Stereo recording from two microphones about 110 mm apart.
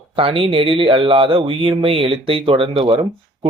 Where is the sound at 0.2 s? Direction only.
55° right (ahead or behind).